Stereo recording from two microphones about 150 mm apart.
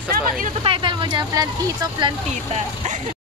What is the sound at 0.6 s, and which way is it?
Speech, 30° right (ahead or behind).